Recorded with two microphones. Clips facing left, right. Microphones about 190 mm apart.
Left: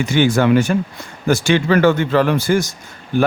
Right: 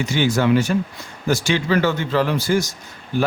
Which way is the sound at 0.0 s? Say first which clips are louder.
Left 4 dB; 55° left (ahead or behind).